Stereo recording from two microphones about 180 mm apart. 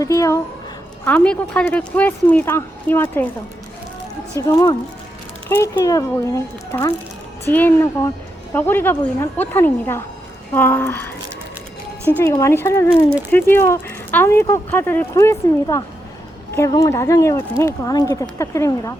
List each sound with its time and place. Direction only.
0.0 s a woman's voice: 15° left (ahead or behind)
4.4 s speech: 15° left (ahead or behind)